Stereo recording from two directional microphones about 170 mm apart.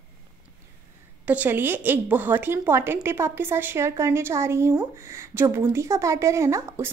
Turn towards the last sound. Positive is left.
turn(degrees=-15)  # may be behind; listen again after turning